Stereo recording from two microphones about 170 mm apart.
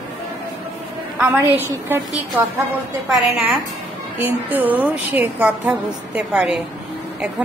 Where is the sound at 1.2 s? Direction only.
10° right (ahead or behind).